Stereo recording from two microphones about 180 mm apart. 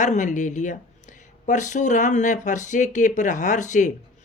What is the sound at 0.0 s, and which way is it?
Speech, 45° left (ahead or behind).